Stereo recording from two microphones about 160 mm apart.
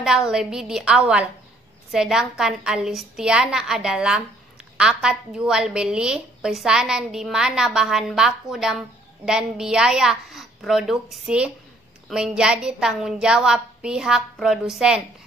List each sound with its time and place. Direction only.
0.0 s a woman's voice: 5° right (ahead or behind)